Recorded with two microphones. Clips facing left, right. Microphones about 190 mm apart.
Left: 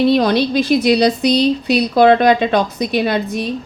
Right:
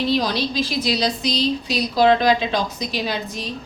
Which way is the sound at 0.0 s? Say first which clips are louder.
Left 8 dB; 60° left (ahead or behind).